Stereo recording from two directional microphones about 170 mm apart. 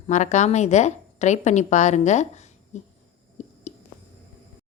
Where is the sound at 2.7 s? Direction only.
45° left (ahead or behind).